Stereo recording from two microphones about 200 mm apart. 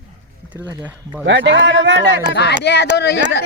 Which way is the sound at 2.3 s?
55° left (ahead or behind).